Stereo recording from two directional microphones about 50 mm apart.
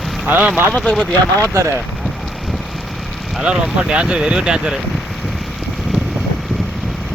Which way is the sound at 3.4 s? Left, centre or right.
Right.